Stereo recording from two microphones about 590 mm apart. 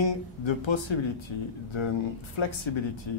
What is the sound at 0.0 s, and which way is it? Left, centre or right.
Speech, left.